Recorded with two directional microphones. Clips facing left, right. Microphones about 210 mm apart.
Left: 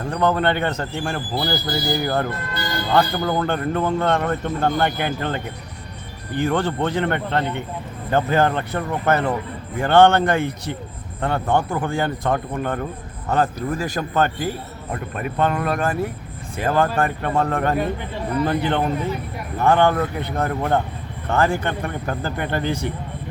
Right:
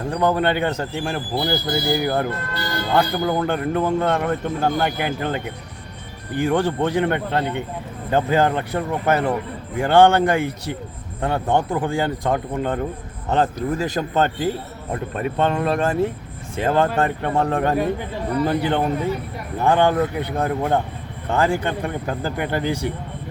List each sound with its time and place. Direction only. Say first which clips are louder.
0.1 s a man's voice: even; 15° right (ahead or behind)